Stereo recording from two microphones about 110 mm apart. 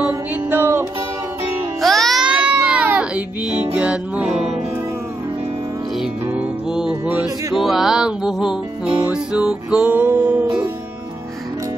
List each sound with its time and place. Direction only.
0.3 s music: 20° right (ahead or behind)
1.8 s music: centre (ahead or behind)
2.3 s music: 10° right (ahead or behind)
6.7 s music: 5° right (ahead or behind)